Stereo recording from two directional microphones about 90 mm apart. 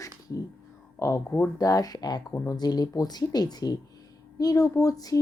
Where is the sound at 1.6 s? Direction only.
40° left (ahead or behind).